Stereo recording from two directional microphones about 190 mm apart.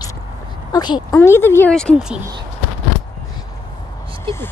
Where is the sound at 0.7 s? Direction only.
20° left (ahead or behind); by 2.1 s centre (ahead or behind).